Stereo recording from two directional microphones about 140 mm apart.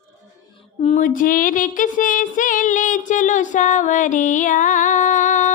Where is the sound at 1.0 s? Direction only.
75° left (ahead or behind).